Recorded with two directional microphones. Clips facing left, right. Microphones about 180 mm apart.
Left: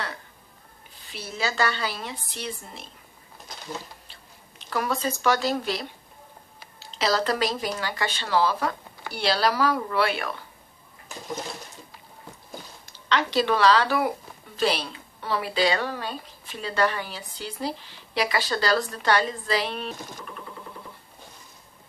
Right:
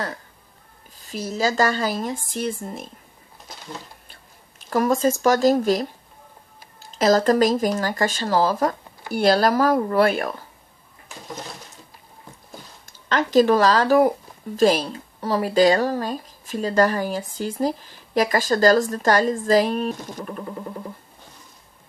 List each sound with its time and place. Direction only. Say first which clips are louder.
1.0 s speech: right 7 dB; 40° right (ahead or behind)
4.1 s speech: even; 45° right (ahead or behind)
12.8 s speech: right 2 dB; 45° right (ahead or behind)